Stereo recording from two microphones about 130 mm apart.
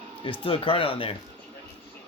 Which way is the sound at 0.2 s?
40° left (ahead or behind).